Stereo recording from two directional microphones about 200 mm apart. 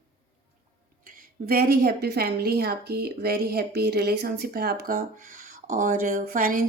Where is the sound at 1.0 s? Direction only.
45° right (ahead or behind).